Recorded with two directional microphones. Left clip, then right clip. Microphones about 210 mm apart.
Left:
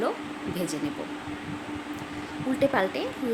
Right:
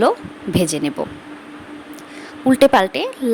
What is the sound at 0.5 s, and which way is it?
Speech, 45° right (ahead or behind).